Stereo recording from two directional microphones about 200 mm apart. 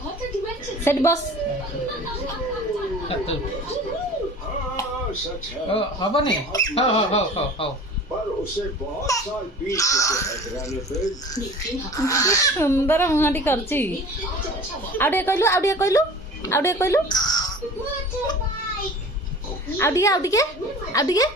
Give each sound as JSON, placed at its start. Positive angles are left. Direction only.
{"t": 0.9, "sound": "speech", "side_deg": 15}
{"t": 5.7, "sound": "speech", "side_deg": 25}
{"t": 9.1, "sound": "speech", "side_deg": 15}
{"t": 11.9, "sound": "speech", "side_deg": 15}
{"t": 14.9, "sound": "speech", "side_deg": 10}
{"t": 19.8, "sound": "speech", "side_deg": 15}